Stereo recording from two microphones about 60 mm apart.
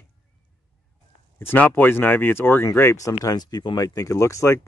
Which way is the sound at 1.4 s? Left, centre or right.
Left.